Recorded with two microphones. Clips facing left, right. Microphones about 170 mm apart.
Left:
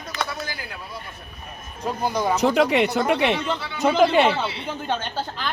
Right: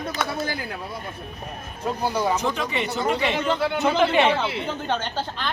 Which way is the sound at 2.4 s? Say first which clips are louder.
Left 8 dB; 70° left (ahead or behind).